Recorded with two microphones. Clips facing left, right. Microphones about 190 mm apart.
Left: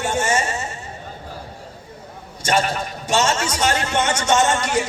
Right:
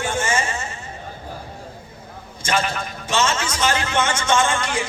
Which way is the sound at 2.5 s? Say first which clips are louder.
Left 3 dB; 40° left (ahead or behind).